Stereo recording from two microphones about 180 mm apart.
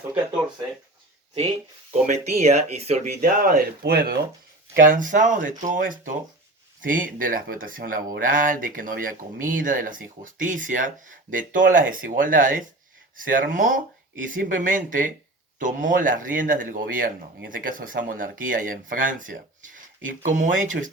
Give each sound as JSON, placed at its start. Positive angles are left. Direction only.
{"t": 1.9, "sound": "speech", "side_deg": -40}
{"t": 4.7, "sound": "speech", "side_deg": -50}